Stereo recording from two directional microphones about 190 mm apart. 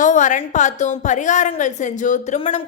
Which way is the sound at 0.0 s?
40° left (ahead or behind).